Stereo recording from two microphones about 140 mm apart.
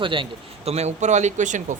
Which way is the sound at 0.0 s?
35° right (ahead or behind).